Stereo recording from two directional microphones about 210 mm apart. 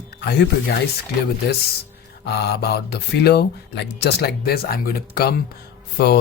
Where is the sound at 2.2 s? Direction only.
50° left (ahead or behind).